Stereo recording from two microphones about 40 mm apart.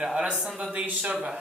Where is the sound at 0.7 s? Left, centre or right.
Right.